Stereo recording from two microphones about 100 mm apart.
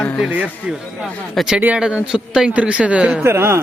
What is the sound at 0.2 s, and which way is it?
Speech, 15° right (ahead or behind).